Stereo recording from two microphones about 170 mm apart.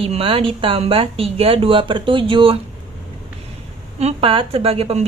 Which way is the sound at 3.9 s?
35° right (ahead or behind).